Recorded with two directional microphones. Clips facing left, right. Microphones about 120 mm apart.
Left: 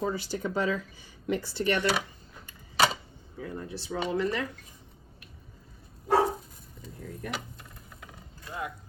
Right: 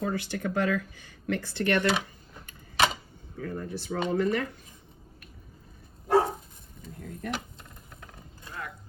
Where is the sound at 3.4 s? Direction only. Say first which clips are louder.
Right 3 dB; 50° right (ahead or behind).